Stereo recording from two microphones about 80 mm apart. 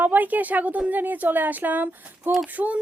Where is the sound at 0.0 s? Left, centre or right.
Right.